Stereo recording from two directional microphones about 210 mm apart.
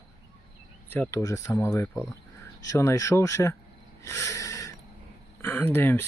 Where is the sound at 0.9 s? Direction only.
10° left (ahead or behind).